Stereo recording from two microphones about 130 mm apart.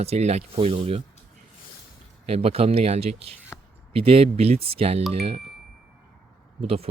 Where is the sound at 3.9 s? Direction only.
50° right (ahead or behind).